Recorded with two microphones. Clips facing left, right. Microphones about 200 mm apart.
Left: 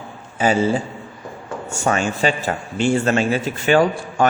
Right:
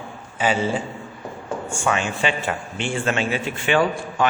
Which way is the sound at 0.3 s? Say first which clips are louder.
Left 4 dB; 40° left (ahead or behind).